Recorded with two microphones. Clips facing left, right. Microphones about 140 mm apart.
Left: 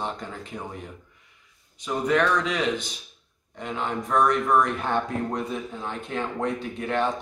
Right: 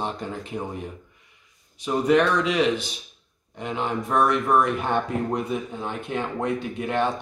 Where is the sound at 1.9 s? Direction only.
15° right (ahead or behind).